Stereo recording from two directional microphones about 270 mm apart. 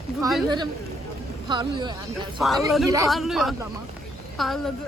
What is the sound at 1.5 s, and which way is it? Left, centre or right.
Speech, centre.